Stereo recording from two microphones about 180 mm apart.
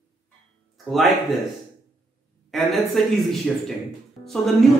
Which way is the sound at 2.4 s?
Centre (ahead or behind).